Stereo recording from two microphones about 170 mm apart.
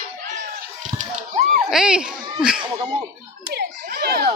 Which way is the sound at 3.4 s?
70° right (ahead or behind).